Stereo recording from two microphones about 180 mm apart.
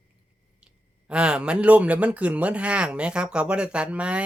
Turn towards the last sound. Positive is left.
turn(degrees=-5)  # may be behind; listen again after turning